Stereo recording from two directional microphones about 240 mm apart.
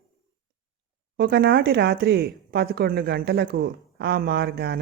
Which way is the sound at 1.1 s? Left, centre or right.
Right.